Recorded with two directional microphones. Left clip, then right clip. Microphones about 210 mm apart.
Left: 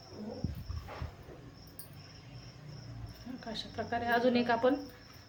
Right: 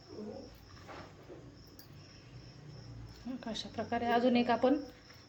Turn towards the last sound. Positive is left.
turn(degrees=-15)  # may be behind; listen again after turning